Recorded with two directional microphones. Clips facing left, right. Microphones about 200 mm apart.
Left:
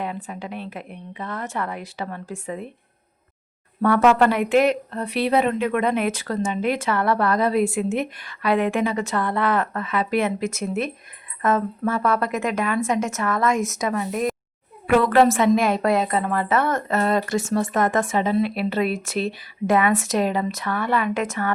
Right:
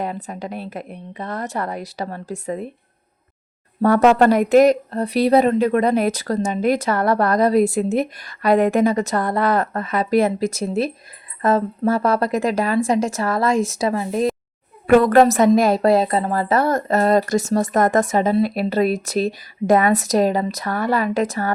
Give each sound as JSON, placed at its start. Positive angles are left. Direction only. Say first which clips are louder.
{"t": 0.0, "sound": "speech", "louder": "right 3 dB", "side_deg": -40}
{"t": 3.8, "sound": "speech", "louder": "right 3 dB", "side_deg": -40}
{"t": 14.8, "sound": "speech", "louder": "right 4 dB", "side_deg": -45}